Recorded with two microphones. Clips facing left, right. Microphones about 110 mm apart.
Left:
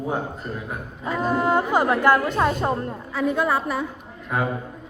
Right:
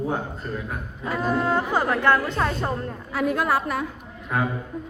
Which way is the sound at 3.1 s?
5° right (ahead or behind).